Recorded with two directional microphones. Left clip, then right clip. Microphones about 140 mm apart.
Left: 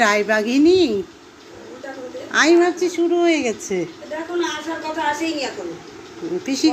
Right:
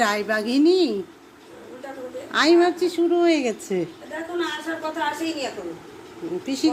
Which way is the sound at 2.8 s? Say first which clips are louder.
Left 2 dB; 20° right (ahead or behind).